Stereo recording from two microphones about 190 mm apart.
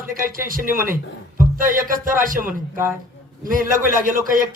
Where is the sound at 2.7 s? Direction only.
15° right (ahead or behind).